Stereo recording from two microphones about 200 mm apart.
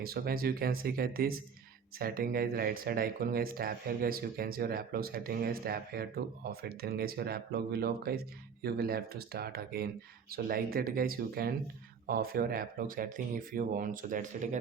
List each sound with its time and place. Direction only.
0.0 s speech: 50° right (ahead or behind)